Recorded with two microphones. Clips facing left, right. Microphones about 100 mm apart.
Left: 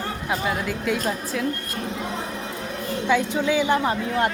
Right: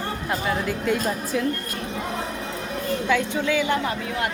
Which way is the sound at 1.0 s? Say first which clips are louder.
Right 1 dB; 5° right (ahead or behind).